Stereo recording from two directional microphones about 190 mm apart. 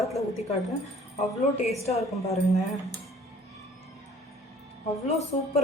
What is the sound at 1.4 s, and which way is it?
A woman's voice, 35° left (ahead or behind).